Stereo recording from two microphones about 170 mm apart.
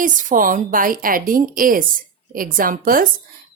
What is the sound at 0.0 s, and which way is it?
A woman's voice, 50° right (ahead or behind).